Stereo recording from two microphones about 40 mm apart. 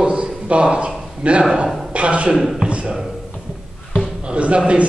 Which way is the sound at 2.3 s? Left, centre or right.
Centre.